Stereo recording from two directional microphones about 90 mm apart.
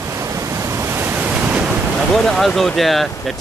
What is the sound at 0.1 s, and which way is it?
Waves, 35° right (ahead or behind).